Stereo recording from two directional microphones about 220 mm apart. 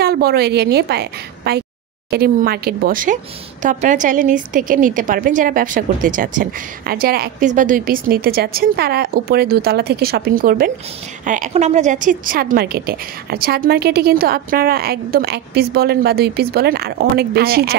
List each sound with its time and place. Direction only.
0.0 s a woman's voice: 45° right (ahead or behind)